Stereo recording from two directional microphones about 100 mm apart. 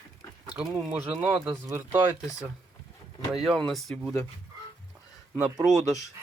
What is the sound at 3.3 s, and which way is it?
Speech, centre (ahead or behind).